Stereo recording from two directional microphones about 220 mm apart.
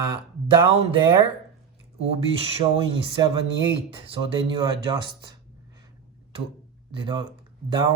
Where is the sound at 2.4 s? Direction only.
25° right (ahead or behind).